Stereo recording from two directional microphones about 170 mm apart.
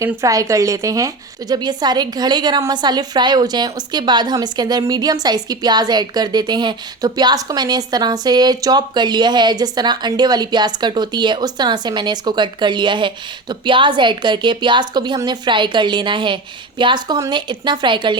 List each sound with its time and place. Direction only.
0.0 s a woman's voice: 15° right (ahead or behind)